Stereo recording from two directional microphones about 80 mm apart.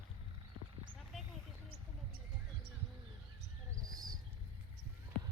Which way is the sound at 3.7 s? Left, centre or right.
Right.